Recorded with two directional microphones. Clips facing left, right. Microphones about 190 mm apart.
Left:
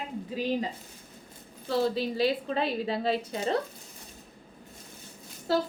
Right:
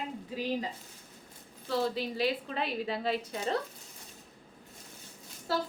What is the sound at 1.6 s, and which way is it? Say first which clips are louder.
A woman's voice: left 4 dB; 30° left (ahead or behind).